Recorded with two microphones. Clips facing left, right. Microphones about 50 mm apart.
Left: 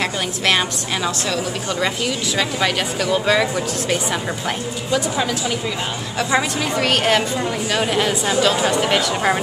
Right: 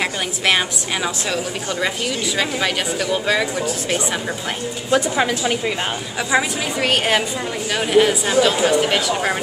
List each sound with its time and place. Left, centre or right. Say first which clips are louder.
0.0 s a woman's voice: even; centre
4.9 s a woman's voice: right 3 dB; right
6.1 s a woman's voice: even; centre